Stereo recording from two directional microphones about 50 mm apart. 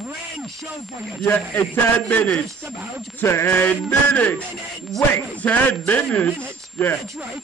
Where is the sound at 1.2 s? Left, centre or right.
Left.